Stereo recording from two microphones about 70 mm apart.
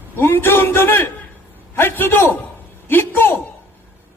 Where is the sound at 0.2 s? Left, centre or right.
Left.